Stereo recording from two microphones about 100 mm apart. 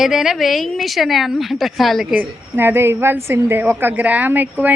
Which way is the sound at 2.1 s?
20° right (ahead or behind).